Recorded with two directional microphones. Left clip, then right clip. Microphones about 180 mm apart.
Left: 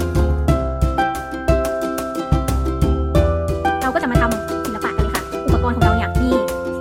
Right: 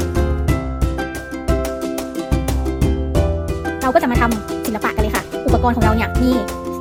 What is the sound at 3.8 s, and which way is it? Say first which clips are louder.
Music: right 3 dB; 20° right (ahead or behind).